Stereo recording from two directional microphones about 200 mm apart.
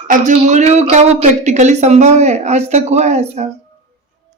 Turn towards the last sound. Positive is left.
turn(degrees=-35)  # may be behind; listen again after turning